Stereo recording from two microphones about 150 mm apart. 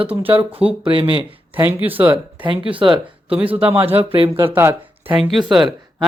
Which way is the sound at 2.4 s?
35° right (ahead or behind).